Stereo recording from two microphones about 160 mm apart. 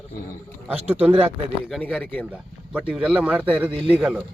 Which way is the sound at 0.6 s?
10° right (ahead or behind).